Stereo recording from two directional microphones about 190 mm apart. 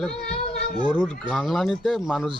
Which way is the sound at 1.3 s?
Centre (ahead or behind).